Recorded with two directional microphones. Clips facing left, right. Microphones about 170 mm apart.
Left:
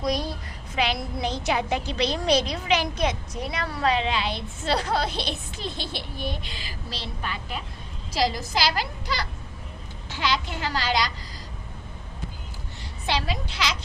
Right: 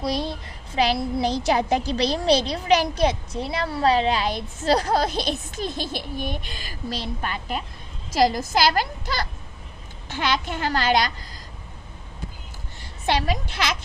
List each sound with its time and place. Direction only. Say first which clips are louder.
0.0 s a child's voice: right 1 dB; 30° right (ahead or behind); by 11.1 s 50° right (ahead or behind)
13.1 s a woman's voice: right 4 dB; 50° right (ahead or behind)